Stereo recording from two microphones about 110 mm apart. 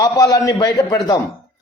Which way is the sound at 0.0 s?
30° left (ahead or behind).